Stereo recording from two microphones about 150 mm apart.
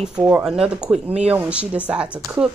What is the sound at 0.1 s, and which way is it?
Speech, 10° right (ahead or behind).